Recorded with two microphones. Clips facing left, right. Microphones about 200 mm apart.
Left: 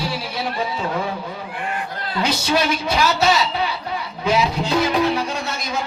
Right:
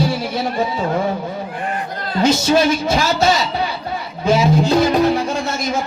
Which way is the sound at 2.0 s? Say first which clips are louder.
Right 7 dB; 40° right (ahead or behind).